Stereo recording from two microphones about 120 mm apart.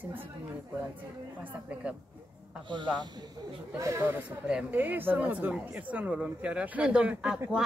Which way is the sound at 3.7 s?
25° right (ahead or behind).